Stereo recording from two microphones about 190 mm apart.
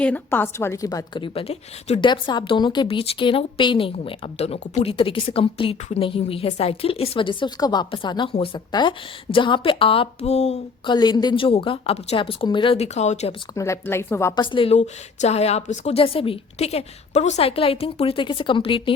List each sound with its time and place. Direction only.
0.0 s a woman's voice: 10° left (ahead or behind); by 10.9 s 35° left (ahead or behind)
10.9 s a woman's voice: 20° left (ahead or behind)
13.5 s a woman's voice: 15° left (ahead or behind)
14.4 s a woman's voice: 25° left (ahead or behind)